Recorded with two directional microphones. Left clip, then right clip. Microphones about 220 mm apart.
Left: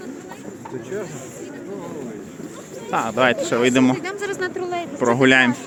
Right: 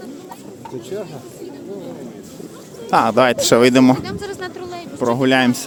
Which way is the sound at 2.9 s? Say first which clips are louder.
Right 5 dB; 30° right (ahead or behind).